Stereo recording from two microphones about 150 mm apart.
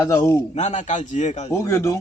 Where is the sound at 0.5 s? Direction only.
50° left (ahead or behind).